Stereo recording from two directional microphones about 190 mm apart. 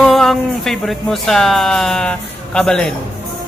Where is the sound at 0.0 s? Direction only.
Centre (ahead or behind).